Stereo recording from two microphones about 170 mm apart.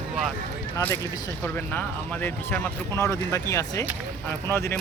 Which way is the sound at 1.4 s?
10° left (ahead or behind).